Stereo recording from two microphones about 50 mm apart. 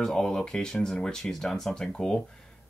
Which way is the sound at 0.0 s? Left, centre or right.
Centre.